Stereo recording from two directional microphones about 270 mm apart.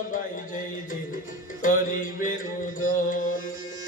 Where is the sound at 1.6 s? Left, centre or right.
Left.